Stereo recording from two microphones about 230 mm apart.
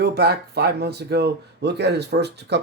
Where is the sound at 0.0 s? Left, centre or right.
Right.